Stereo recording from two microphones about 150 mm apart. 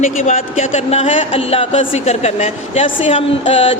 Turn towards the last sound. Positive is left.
turn(degrees=40)  # may be behind; listen again after turning